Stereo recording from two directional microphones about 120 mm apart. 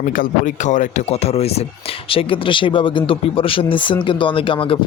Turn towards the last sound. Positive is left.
turn(degrees=45)  # may be behind; listen again after turning